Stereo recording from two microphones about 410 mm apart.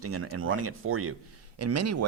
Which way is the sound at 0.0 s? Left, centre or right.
Right.